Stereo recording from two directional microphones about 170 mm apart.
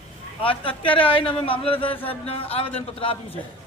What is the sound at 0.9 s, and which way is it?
A man's voice, 30° left (ahead or behind).